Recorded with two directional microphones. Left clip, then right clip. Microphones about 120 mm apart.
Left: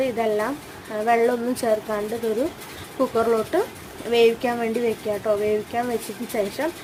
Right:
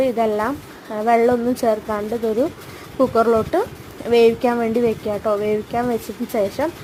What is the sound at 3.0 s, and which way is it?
Speech, 35° right (ahead or behind).